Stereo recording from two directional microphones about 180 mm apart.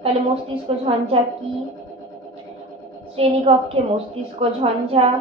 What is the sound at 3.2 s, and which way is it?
Speech, 30° right (ahead or behind).